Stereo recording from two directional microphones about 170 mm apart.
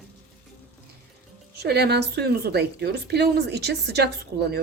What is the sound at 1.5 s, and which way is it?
A woman's voice, 70° right (ahead or behind).